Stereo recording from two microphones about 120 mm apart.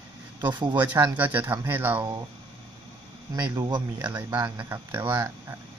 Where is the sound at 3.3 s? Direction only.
30° right (ahead or behind).